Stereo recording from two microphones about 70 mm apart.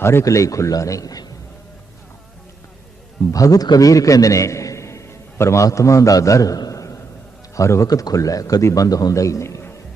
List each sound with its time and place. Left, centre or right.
0.0 s a man's voice: left
3.3 s a man's voice: left